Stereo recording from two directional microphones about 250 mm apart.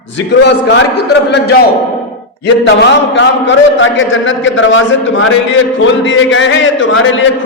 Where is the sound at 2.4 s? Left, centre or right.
Left.